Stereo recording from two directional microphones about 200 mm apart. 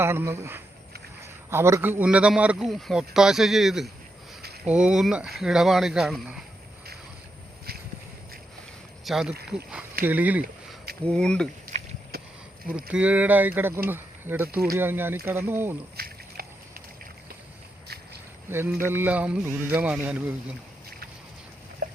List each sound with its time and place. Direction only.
0.0 s a man's voice: 10° right (ahead or behind)
9.0 s speech: centre (ahead or behind)
11.0 s a man's voice: 5° left (ahead or behind)
11.6 s a sound: 45° right (ahead or behind)
12.7 s speech: 5° right (ahead or behind)
16.0 s a sound: 50° right (ahead or behind)
18.4 s speech: 10° right (ahead or behind)